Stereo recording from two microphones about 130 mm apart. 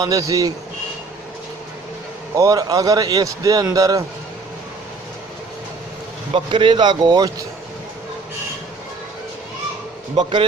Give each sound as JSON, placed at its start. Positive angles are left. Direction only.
{"t": 0.0, "sound": "a man's voice", "side_deg": -25}
{"t": 2.3, "sound": "a man's voice", "side_deg": -25}
{"t": 6.3, "sound": "speech", "side_deg": -40}